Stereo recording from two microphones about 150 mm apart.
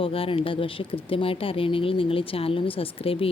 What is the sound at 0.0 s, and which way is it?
Speech, 35° left (ahead or behind).